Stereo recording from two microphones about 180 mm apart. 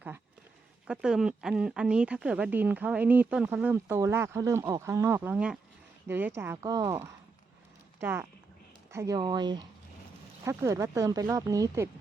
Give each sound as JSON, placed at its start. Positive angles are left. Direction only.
{"t": 0.9, "sound": "a woman's voice", "side_deg": -5}